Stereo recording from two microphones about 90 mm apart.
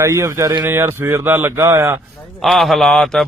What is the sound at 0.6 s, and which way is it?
Speech, 25° right (ahead or behind).